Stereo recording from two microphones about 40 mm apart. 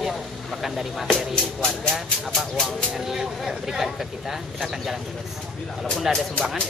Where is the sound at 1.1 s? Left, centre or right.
Left.